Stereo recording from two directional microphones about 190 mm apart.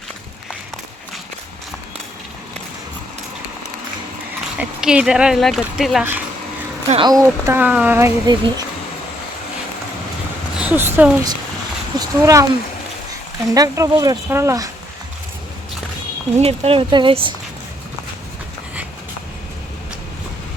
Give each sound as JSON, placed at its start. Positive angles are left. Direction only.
{"t": 4.5, "sound": "speech", "side_deg": -5}
{"t": 6.8, "sound": "speech", "side_deg": -25}
{"t": 8.3, "sound": "speech", "side_deg": -25}
{"t": 10.6, "sound": "speech", "side_deg": -10}
{"t": 13.5, "sound": "speech", "side_deg": -15}
{"t": 16.4, "sound": "speech", "side_deg": -30}